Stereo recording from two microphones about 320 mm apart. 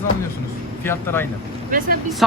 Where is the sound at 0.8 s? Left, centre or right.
Centre.